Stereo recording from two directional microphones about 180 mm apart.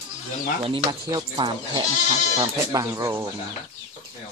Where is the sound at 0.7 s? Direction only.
25° right (ahead or behind).